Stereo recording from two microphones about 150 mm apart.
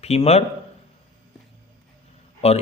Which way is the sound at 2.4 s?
45° left (ahead or behind).